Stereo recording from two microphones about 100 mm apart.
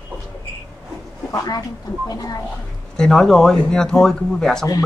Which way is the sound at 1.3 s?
40° left (ahead or behind).